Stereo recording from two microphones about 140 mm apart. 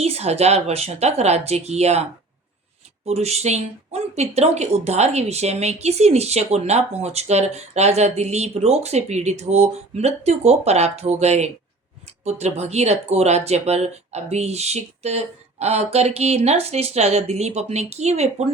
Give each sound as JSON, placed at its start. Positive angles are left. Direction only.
{"t": 0.0, "sound": "speech", "side_deg": -50}